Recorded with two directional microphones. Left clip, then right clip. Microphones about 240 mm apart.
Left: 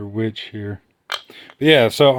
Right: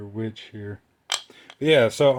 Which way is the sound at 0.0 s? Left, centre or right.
Left.